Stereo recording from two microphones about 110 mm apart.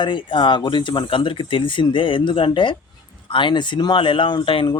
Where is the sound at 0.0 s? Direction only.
45° left (ahead or behind).